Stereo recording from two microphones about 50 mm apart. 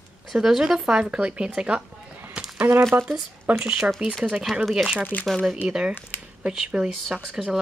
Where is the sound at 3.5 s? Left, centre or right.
Right.